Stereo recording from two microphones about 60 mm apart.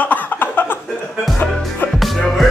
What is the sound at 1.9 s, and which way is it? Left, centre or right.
Music, centre.